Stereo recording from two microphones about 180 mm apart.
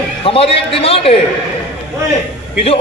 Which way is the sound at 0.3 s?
30° left (ahead or behind).